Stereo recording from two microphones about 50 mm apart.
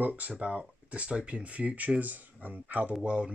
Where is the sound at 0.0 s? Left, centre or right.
Right.